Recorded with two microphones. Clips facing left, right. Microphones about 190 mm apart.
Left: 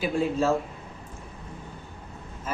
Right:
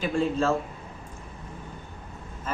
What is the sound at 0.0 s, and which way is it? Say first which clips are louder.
Speech: even; 10° left (ahead or behind).